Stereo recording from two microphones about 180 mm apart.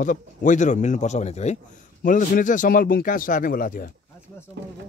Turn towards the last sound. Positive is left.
turn(degrees=50)  # may be behind; listen again after turning